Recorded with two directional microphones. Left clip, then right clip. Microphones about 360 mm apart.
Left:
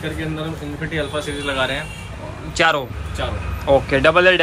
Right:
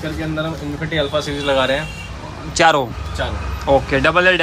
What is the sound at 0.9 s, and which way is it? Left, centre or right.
Speech, right.